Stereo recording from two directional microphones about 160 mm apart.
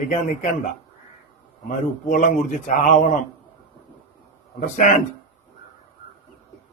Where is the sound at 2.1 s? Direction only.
50° left (ahead or behind).